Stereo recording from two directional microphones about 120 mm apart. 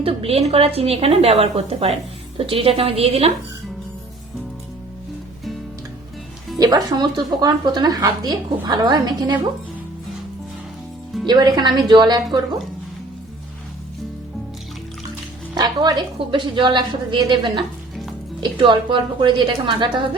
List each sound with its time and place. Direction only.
0.0 s a woman's voice: 55° right (ahead or behind)
6.6 s speech: 35° right (ahead or behind)
11.3 s speech: 35° right (ahead or behind)
15.5 s speech: 35° right (ahead or behind)
17.6 s frying: centre (ahead or behind)
18.3 s a woman's voice: 40° right (ahead or behind)